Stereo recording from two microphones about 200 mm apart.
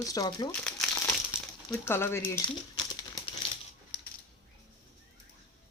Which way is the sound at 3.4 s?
25° left (ahead or behind).